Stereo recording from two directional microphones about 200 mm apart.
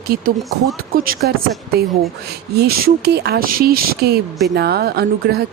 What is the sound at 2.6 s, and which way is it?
A woman's voice, 50° right (ahead or behind).